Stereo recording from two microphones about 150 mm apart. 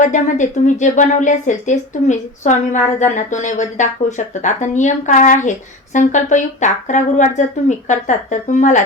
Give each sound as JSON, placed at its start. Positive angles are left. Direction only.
{"t": 0.0, "sound": "a woman's voice", "side_deg": 55}